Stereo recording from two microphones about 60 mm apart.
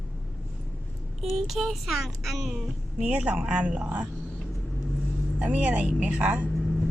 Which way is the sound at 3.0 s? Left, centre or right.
Centre.